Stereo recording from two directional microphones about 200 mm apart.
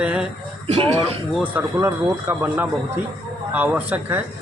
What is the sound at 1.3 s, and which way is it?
Speech, 10° right (ahead or behind).